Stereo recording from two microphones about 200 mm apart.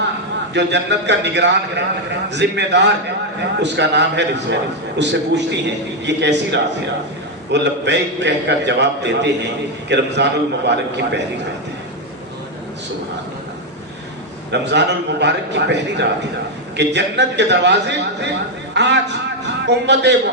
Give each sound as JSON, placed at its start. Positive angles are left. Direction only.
{"t": 0.5, "sound": "a man's voice", "side_deg": -60}
{"t": 14.5, "sound": "a man's voice", "side_deg": -60}